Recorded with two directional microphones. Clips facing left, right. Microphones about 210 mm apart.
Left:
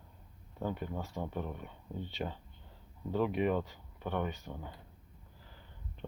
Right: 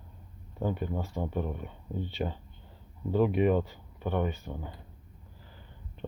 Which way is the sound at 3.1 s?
10° right (ahead or behind).